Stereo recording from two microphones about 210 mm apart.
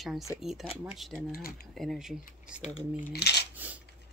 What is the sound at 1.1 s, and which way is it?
Speech, 45° left (ahead or behind).